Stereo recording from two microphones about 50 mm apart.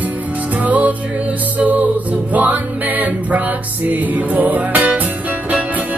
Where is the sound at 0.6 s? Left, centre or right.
Right.